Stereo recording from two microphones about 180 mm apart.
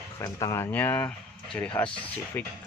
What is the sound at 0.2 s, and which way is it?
Speech, 20° left (ahead or behind).